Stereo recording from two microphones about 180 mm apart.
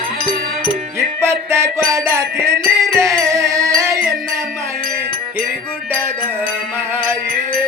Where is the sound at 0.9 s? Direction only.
15° right (ahead or behind).